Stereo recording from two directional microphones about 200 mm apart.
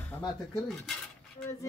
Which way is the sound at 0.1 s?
10° left (ahead or behind).